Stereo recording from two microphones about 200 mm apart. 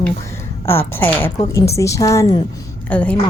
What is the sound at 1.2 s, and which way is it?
A woman's voice, 15° left (ahead or behind).